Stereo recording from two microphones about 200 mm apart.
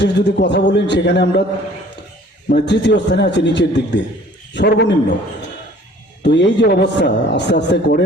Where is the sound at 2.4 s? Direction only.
60° left (ahead or behind).